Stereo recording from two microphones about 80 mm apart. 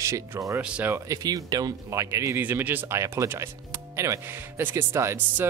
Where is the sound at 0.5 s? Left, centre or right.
Centre.